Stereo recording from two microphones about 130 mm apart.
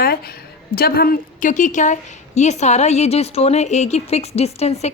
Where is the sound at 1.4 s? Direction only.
70° left (ahead or behind).